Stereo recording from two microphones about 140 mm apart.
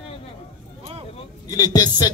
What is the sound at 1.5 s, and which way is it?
Music, 25° left (ahead or behind).